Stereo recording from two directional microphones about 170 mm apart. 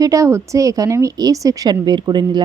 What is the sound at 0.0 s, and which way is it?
A woman's voice, 20° right (ahead or behind).